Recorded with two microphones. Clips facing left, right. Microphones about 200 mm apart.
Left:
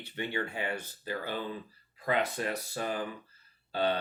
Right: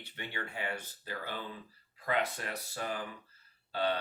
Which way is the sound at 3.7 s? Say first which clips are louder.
Left 3 dB; 20° left (ahead or behind).